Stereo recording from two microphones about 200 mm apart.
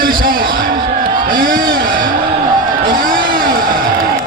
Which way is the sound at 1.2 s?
45° right (ahead or behind).